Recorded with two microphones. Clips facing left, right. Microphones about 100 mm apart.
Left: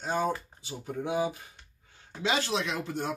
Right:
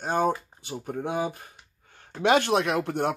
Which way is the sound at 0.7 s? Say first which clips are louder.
Right 2 dB; 50° right (ahead or behind).